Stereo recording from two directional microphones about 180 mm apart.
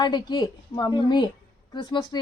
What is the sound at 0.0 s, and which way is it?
A woman's voice, 25° left (ahead or behind).